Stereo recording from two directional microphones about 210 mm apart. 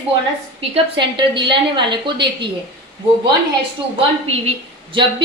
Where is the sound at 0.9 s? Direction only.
20° right (ahead or behind).